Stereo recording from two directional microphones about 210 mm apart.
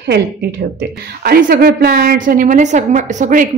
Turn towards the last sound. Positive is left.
turn(degrees=-35)  # may be behind; listen again after turning